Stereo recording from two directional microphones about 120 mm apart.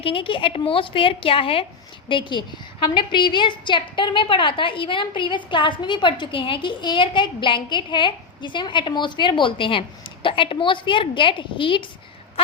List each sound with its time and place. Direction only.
0.0 s a woman's voice: 45° left (ahead or behind)